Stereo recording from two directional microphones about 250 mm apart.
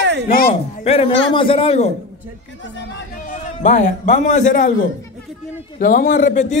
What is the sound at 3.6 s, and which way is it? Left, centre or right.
Speech, left.